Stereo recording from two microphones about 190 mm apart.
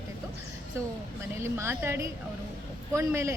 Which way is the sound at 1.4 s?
15° right (ahead or behind).